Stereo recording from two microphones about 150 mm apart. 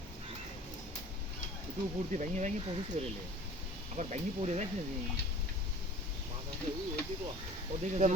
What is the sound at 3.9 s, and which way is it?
Speech, 50° right (ahead or behind).